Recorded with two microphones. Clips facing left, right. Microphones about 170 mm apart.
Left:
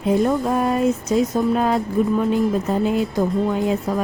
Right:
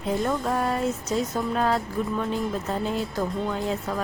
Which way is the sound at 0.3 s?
20° left (ahead or behind).